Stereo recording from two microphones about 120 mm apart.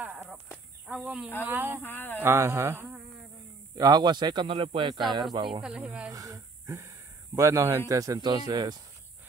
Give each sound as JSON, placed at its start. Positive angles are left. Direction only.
{"t": 0.0, "sound": "a sound", "side_deg": -15}
{"t": 0.8, "sound": "speech", "side_deg": -10}
{"t": 1.8, "sound": "speech", "side_deg": 15}
{"t": 2.2, "sound": "speech", "side_deg": -20}
{"t": 3.7, "sound": "speech", "side_deg": -35}
{"t": 5.6, "sound": "speech", "side_deg": -10}
{"t": 6.1, "sound": "speech", "side_deg": -30}